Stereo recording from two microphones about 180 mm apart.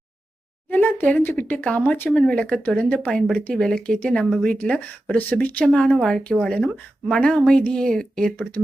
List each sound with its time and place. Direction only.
0.7 s speech: 10° left (ahead or behind)